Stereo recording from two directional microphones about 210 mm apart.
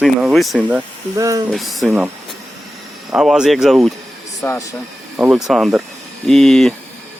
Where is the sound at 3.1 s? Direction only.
5° right (ahead or behind).